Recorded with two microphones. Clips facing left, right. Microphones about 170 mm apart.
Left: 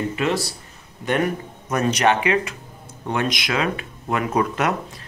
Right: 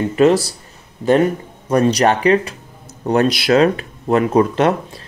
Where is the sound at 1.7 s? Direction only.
35° right (ahead or behind).